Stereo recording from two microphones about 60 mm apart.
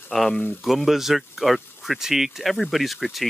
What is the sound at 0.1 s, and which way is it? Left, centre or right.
Speech, centre.